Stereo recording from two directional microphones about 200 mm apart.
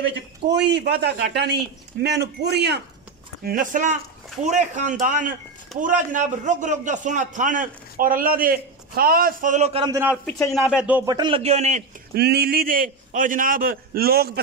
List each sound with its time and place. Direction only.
0.6 s speech: 60° right (ahead or behind)
3.4 s a man's voice: 45° right (ahead or behind)
9.8 s a man's voice: 10° right (ahead or behind)
10.2 s speech: 5° left (ahead or behind)
11.1 s speech: 25° right (ahead or behind)
12.1 s a man's voice: 55° right (ahead or behind)